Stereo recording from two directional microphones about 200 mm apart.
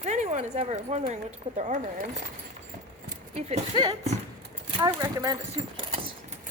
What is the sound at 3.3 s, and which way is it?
Speech, 30° right (ahead or behind).